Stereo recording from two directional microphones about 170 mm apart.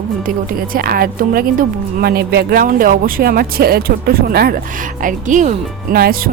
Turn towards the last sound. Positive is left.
turn(degrees=-60)  # may be behind; listen again after turning